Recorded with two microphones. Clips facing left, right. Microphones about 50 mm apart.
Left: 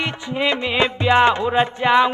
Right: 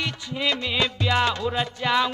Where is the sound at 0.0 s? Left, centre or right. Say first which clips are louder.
Left 5 dB; left.